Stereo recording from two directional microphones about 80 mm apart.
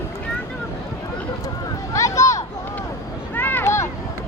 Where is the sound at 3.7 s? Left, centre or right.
Left.